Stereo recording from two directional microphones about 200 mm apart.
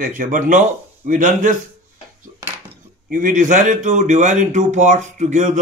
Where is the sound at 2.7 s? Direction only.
40° right (ahead or behind).